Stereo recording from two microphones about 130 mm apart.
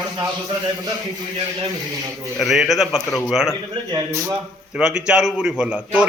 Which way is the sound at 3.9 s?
25° right (ahead or behind).